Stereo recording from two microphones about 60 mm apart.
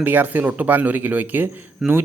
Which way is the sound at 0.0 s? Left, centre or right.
Right.